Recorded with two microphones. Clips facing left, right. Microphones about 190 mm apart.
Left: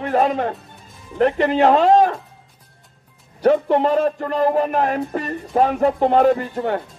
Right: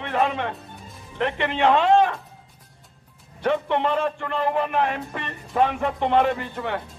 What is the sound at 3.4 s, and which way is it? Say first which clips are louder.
Speech: left 7 dB; 40° left (ahead or behind).